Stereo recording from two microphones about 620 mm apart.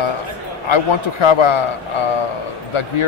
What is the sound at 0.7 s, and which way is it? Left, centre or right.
Speech, left.